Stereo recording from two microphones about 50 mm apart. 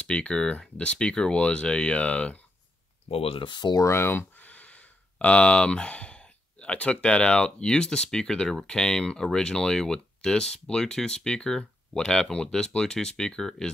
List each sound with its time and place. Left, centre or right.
0.0 s speech: left
3.8 s speech: left
4.4 s speech: left; by 13.7 s centre